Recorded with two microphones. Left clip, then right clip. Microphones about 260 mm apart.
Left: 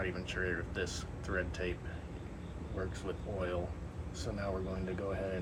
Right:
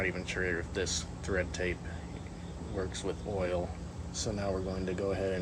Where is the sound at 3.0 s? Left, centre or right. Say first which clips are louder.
Right 5 dB; right.